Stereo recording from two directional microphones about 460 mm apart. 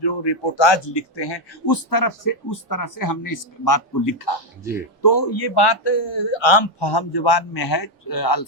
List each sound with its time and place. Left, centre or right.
0.0 s speech: left